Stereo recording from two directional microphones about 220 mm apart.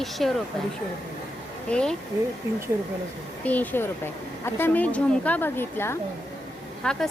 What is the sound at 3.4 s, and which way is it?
A woman's voice, 5° left (ahead or behind).